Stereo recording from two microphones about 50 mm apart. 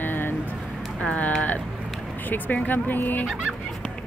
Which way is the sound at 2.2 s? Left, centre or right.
Left.